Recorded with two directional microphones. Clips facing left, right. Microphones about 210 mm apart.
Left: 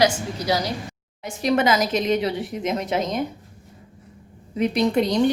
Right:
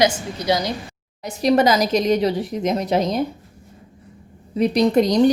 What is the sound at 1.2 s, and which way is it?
A woman's voice, 35° right (ahead or behind).